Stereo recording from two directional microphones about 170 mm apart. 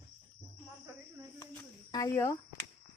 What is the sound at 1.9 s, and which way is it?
Speech, 20° left (ahead or behind).